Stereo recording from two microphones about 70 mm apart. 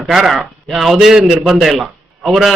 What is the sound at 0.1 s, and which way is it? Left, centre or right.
Speech, centre.